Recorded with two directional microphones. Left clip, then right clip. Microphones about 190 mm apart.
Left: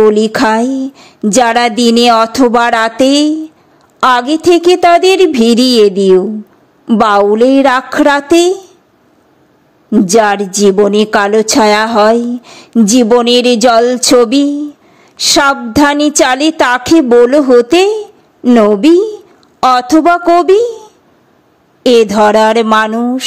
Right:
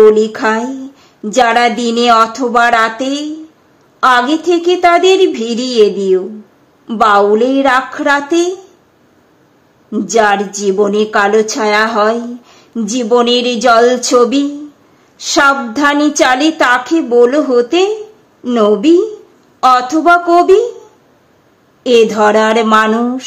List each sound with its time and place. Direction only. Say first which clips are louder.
0.0 s a woman's voice: even; 40° left (ahead or behind)
9.8 s a woman's voice: left 2 dB; 35° left (ahead or behind)
21.8 s speech: left 2 dB; 45° left (ahead or behind)